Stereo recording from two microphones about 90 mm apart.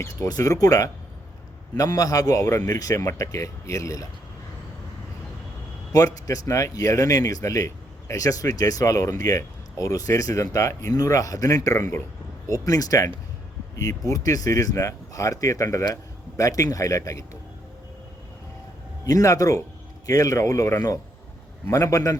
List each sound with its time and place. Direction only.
0.0 s a man's voice: 40° left (ahead or behind)
5.9 s a man's voice: 40° left (ahead or behind)
19.0 s a man's voice: 40° left (ahead or behind)